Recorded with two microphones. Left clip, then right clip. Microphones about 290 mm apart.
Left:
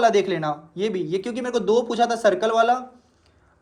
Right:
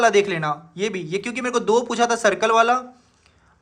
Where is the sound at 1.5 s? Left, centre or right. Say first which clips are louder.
Right 1 dB; right.